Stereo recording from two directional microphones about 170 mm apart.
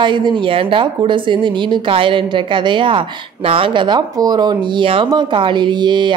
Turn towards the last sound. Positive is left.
turn(degrees=-25)  # may be behind; listen again after turning